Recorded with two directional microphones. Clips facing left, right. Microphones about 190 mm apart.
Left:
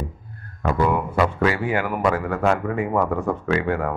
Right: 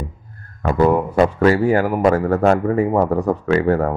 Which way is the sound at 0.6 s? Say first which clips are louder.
Right 5 dB; 40° right (ahead or behind).